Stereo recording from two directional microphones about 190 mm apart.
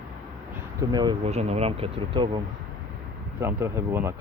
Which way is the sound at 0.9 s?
20° right (ahead or behind).